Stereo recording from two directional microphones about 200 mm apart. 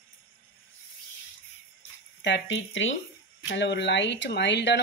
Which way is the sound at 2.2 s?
65° left (ahead or behind).